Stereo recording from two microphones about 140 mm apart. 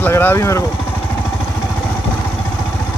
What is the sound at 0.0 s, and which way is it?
Speech, 15° left (ahead or behind).